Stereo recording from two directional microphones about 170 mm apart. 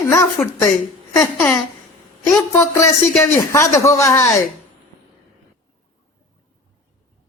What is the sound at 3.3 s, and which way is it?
A woman's voice, 15° left (ahead or behind).